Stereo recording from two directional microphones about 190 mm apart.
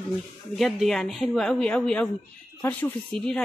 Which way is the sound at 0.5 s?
Centre (ahead or behind).